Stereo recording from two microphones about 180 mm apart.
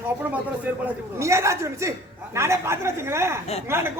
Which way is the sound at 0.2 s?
10° right (ahead or behind).